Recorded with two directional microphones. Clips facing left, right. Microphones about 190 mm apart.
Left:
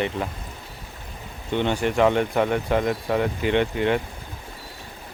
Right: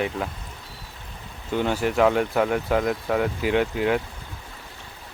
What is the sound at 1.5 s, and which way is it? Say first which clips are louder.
Speech: even; 5° right (ahead or behind).